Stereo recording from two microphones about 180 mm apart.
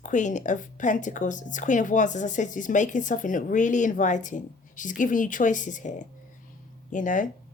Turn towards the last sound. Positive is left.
turn(degrees=45)  # may be behind; listen again after turning